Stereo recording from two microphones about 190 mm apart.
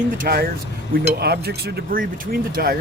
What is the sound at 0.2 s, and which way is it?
Speech, 50° right (ahead or behind).